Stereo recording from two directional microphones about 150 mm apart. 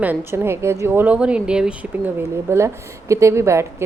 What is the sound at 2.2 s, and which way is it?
A woman's voice, 15° right (ahead or behind).